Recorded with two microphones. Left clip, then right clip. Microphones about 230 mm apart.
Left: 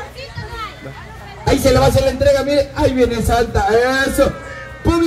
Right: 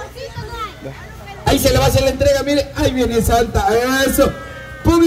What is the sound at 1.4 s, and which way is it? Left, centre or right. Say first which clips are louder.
Speech: left 1 dB; right.